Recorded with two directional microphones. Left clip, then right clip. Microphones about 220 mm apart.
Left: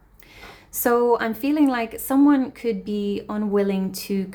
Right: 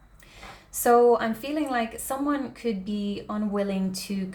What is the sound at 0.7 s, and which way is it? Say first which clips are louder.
A woman's voice: even; 35° left (ahead or behind).